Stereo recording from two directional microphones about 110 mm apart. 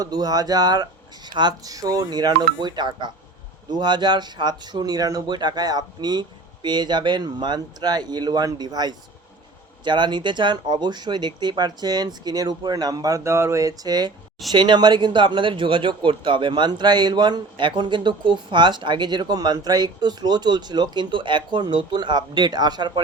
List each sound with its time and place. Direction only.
0.0 s speech: 35° right (ahead or behind)